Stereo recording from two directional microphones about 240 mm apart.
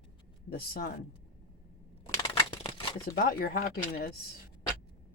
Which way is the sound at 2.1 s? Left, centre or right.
Left.